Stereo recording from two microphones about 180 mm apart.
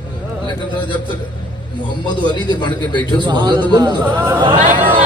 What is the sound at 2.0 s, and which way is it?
Speech, 25° left (ahead or behind).